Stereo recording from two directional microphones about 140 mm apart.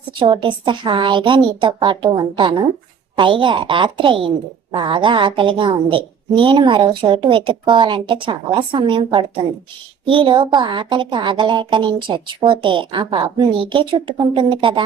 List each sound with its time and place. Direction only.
0.2 s a woman's voice: 35° right (ahead or behind)